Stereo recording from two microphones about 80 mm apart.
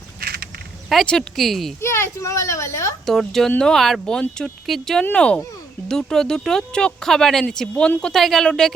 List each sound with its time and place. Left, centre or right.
1.0 s speech: centre
1.8 s a child's voice: left
3.1 s speech: centre